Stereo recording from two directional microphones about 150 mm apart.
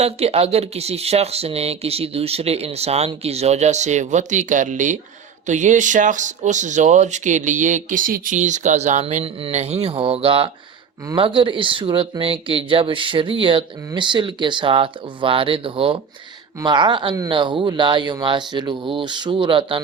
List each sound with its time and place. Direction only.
0.0 s speech: 45° right (ahead or behind)